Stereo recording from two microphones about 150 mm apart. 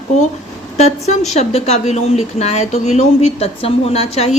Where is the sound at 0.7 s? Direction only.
50° left (ahead or behind).